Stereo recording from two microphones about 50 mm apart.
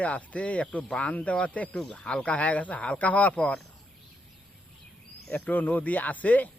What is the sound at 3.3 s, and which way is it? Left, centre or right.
Speech, left.